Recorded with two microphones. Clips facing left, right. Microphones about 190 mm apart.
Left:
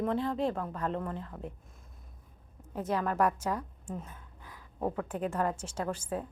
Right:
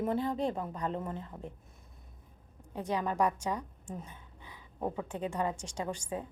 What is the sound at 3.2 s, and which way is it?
Speech, 15° right (ahead or behind).